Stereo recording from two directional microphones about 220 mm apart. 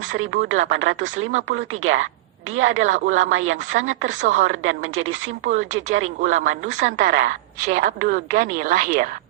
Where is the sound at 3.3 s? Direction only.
65° right (ahead or behind).